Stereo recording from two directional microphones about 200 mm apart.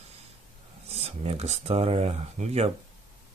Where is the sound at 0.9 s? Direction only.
30° right (ahead or behind).